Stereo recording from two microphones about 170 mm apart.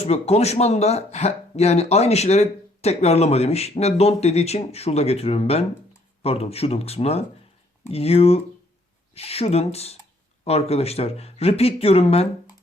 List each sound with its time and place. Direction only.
0.0 s speech: 40° left (ahead or behind)